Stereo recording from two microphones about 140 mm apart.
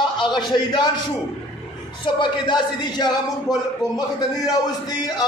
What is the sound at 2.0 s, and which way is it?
A man's voice, 35° left (ahead or behind).